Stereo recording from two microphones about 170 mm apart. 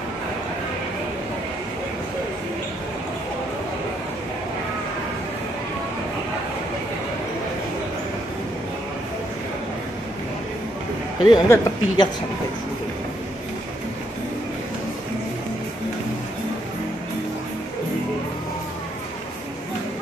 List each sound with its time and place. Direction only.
11.2 s a woman's voice: 20° left (ahead or behind)